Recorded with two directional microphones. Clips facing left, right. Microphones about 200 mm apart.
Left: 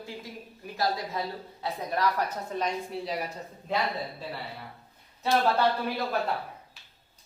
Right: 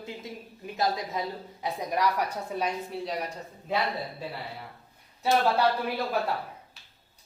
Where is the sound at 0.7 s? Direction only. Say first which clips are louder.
Right 1 dB; 20° right (ahead or behind); by 3.3 s centre (ahead or behind).